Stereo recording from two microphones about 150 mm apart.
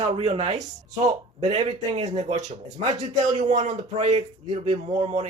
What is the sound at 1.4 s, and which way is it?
Speech, 45° right (ahead or behind).